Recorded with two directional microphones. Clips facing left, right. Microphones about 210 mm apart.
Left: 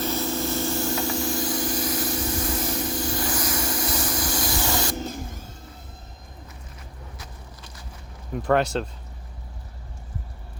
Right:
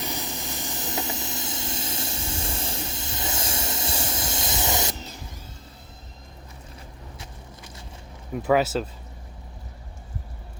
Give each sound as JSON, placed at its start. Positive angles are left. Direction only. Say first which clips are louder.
{"t": 0.0, "sound": "vehicle", "louder": "left 8 dB", "side_deg": -15}
{"t": 4.9, "sound": "vehicle", "louder": "left 9 dB", "side_deg": 50}
{"t": 8.3, "sound": "speech", "louder": "even", "side_deg": -5}